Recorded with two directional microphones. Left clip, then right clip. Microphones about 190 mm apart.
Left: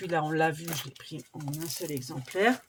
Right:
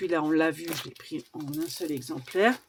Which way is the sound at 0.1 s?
40° right (ahead or behind).